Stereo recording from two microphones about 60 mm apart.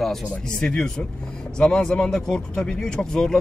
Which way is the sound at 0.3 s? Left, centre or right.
Centre.